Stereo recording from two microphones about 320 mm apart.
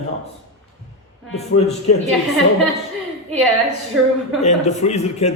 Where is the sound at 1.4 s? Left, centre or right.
Centre.